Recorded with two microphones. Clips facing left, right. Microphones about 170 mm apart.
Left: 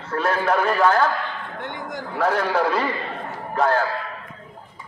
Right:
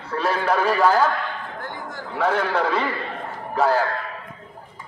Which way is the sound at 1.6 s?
20° left (ahead or behind).